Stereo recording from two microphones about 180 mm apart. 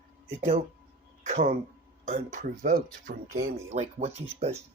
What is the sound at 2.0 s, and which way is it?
Speech, 40° right (ahead or behind).